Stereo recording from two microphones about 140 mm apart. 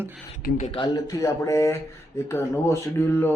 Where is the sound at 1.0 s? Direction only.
25° left (ahead or behind).